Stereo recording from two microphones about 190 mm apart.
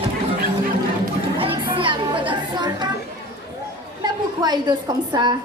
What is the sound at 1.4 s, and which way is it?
Chatter, 25° right (ahead or behind).